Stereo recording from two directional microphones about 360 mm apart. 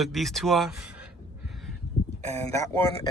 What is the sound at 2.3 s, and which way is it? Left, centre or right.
Speech, centre.